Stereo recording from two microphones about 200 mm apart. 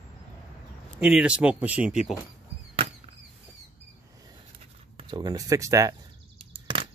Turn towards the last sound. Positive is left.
turn(degrees=-25)  # may be behind; listen again after turning